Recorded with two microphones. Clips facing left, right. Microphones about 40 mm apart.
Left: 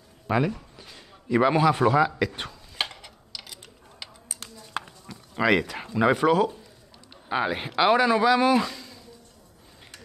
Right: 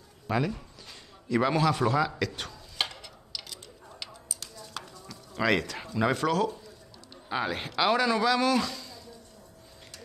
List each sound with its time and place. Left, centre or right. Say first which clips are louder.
0.3 s a man's voice: left 4 dB; centre
4.7 s a sound: left 8 dB; left
7.2 s speech: left 4 dB; centre